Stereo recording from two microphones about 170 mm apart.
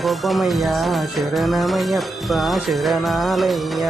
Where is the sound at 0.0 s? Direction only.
Centre (ahead or behind).